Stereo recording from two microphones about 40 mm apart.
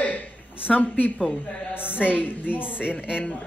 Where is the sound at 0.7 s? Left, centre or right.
Left.